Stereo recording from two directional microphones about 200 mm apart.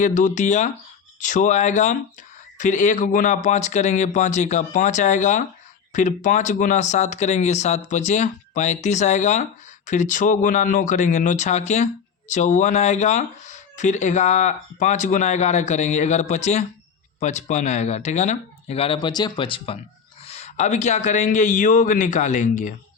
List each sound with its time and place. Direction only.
0.0 s speech: 40° left (ahead or behind)